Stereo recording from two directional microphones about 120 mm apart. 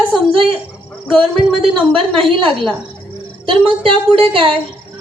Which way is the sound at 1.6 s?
50° right (ahead or behind).